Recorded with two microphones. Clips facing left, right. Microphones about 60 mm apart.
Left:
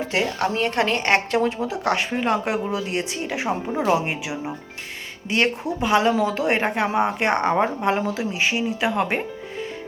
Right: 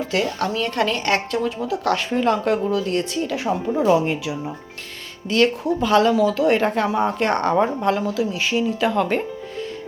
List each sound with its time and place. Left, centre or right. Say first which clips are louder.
0.1 s a woman's voice: even; left
5.8 s a woman's voice: right 2 dB; left